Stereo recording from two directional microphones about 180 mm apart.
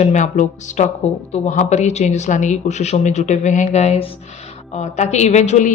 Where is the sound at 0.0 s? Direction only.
40° left (ahead or behind).